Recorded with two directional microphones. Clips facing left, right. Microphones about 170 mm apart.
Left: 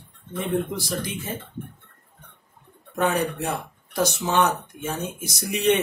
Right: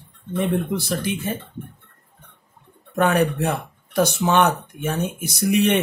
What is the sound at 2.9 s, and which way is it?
Speech, 60° right (ahead or behind).